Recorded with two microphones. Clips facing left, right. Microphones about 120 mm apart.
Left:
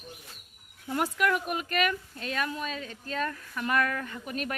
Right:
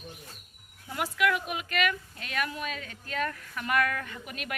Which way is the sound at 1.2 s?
40° left (ahead or behind).